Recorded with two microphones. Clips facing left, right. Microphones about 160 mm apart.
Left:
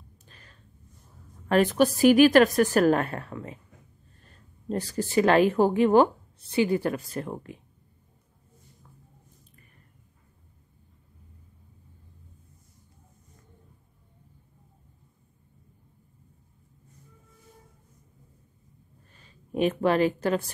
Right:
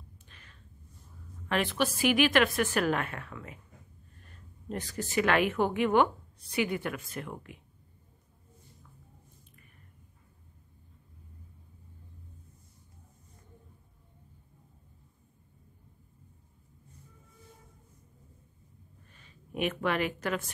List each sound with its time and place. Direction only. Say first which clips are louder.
0.3 s a sound: left 3 dB; 40° left (ahead or behind)
1.5 s a woman's voice: left 8 dB; 40° left (ahead or behind)
19.1 s speech: left 7 dB; 35° left (ahead or behind)